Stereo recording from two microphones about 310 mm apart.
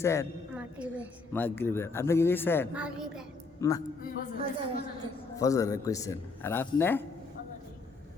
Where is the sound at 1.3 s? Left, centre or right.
Centre.